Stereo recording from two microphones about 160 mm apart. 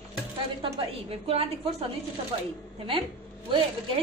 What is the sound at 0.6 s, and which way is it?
A woman's voice, 35° right (ahead or behind).